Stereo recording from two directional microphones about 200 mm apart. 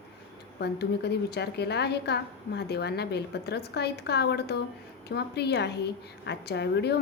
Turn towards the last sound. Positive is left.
turn(degrees=55)  # may be behind; listen again after turning